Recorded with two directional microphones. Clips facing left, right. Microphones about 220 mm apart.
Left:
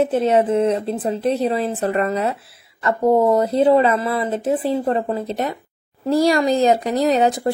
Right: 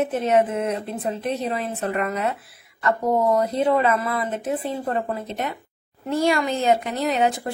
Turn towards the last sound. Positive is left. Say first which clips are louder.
# left 5 dB
turn(degrees=35)  # may be behind; listen again after turning